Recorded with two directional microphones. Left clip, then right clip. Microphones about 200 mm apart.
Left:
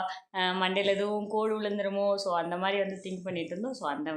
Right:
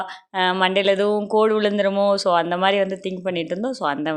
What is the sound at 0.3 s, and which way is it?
Speech, 35° right (ahead or behind).